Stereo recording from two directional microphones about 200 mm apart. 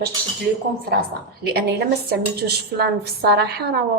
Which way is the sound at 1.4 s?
55° right (ahead or behind).